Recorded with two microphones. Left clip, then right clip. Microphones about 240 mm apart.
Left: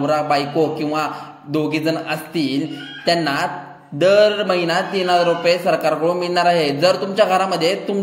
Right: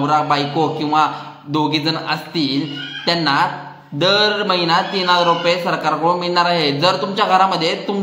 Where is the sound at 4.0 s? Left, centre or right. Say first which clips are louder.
Left 2 dB; centre.